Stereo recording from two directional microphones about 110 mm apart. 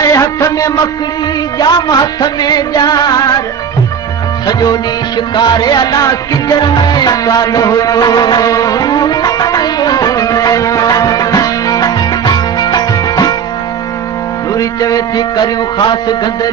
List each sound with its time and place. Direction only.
0.0 s music: 30° left (ahead or behind)
4.5 s music: 35° left (ahead or behind)
14.5 s a man's voice: 30° left (ahead or behind)